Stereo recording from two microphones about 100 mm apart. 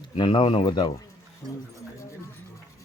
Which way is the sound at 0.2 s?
65° left (ahead or behind).